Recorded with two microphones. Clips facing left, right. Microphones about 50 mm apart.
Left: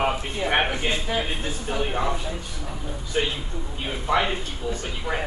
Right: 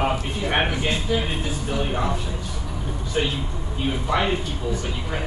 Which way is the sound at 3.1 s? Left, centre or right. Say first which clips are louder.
Right 1 dB; centre.